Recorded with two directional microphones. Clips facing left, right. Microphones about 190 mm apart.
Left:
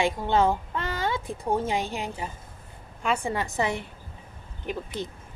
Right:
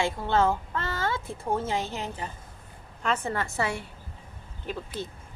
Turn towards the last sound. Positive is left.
turn(degrees=15)  # may be behind; listen again after turning